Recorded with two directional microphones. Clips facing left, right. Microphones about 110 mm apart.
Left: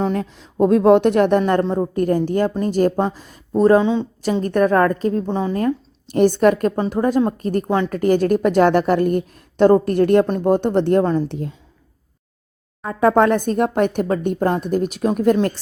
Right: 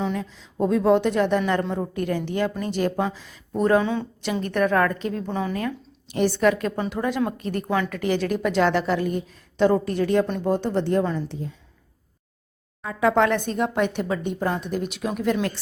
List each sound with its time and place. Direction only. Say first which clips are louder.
0.0 s speech: left 6 dB; 55° left (ahead or behind)
1.4 s speech: left 6 dB; 45° left (ahead or behind)
1.6 s a woman's voice: left 7 dB; 35° left (ahead or behind)
3.5 s a woman's voice: left 6 dB; 30° left (ahead or behind)
5.6 s a woman's voice: left 9 dB; 45° left (ahead or behind)
11.3 s a woman's voice: left 6 dB; 65° left (ahead or behind)
12.8 s speech: left 5 dB; 45° left (ahead or behind)